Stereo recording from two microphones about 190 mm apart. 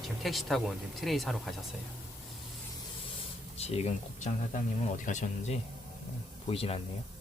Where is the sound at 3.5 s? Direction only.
35° left (ahead or behind).